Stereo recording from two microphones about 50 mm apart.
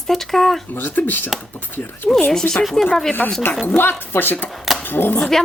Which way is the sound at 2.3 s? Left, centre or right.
Centre.